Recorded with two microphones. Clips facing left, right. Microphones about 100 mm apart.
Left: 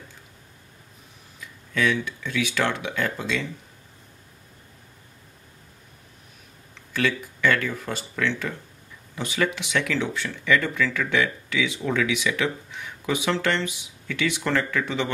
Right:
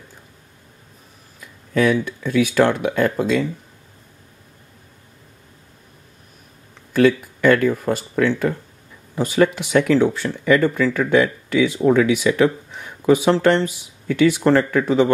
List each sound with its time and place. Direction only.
1.7 s speech: 45° right (ahead or behind)
6.9 s speech: 40° right (ahead or behind)